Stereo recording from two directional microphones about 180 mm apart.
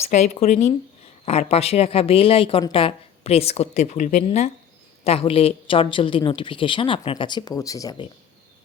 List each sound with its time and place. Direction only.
0.1 s a woman's voice: 40° left (ahead or behind); by 8.0 s 20° left (ahead or behind)